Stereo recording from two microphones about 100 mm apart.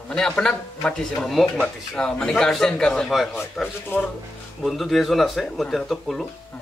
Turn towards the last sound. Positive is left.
turn(degrees=0)  # may be behind; listen again after turning